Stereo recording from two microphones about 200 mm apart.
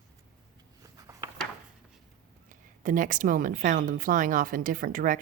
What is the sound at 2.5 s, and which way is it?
Speech, 40° right (ahead or behind).